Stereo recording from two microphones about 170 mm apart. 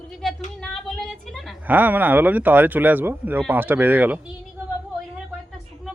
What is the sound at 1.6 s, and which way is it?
Speech, 10° right (ahead or behind).